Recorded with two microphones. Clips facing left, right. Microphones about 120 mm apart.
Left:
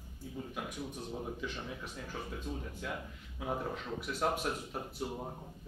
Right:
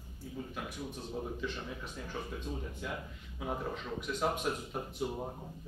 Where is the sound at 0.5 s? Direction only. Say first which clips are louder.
Even; 10° left (ahead or behind).